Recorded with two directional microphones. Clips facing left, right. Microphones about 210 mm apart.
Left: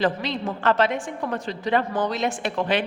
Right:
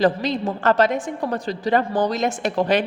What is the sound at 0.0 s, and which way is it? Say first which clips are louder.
A woman's voice: right 5 dB; 40° right (ahead or behind).